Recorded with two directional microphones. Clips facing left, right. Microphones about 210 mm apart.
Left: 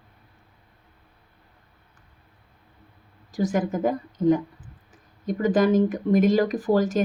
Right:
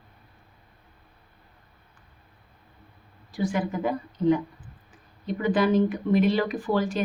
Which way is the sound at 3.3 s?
40° left (ahead or behind).